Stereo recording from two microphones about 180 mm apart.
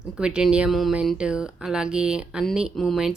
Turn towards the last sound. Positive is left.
turn(degrees=0)  # may be behind; listen again after turning